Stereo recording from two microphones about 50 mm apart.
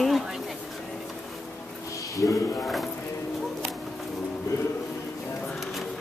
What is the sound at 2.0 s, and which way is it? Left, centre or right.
Speech, left.